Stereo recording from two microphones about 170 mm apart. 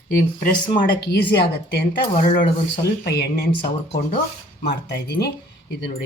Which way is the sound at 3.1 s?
75° left (ahead or behind).